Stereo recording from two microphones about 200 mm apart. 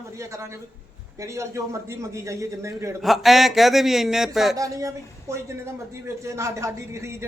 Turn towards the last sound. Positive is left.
turn(degrees=-15)  # may be behind; listen again after turning